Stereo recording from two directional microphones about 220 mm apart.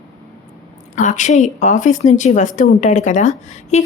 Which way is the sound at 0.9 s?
35° left (ahead or behind).